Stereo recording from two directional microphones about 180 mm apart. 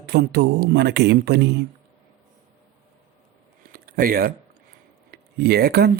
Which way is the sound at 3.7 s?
55° right (ahead or behind).